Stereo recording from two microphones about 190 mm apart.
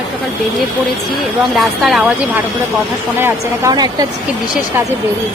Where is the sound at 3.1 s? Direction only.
15° right (ahead or behind).